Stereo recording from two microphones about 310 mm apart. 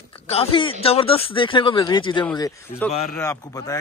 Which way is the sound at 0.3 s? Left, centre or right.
Centre.